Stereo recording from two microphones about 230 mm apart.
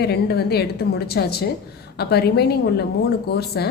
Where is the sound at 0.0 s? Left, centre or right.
Left.